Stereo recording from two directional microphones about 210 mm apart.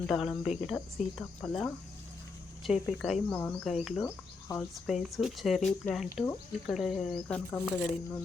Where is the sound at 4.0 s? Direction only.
15° left (ahead or behind).